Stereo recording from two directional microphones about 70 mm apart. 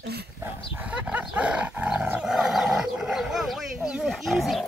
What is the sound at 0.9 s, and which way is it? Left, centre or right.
Dog, centre.